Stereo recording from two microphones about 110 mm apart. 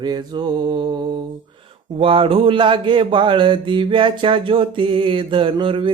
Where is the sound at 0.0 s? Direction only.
40° right (ahead or behind).